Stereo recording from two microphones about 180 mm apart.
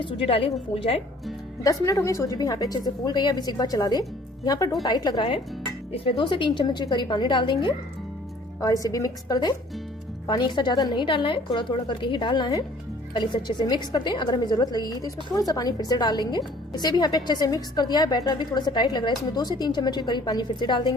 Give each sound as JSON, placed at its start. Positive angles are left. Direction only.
{"t": 0.0, "sound": "a woman's voice", "side_deg": 30}
{"t": 1.6, "sound": "a woman's voice", "side_deg": 15}